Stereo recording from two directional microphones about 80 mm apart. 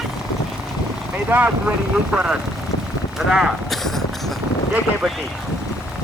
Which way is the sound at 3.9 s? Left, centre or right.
Centre.